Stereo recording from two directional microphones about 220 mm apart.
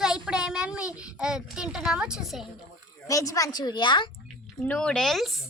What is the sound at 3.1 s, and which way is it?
Speech, 15° left (ahead or behind).